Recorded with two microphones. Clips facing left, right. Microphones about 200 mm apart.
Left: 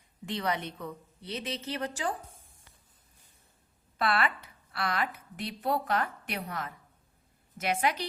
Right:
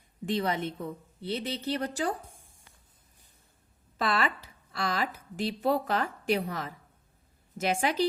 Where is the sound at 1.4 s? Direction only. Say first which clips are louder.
Right 1 dB; 35° right (ahead or behind).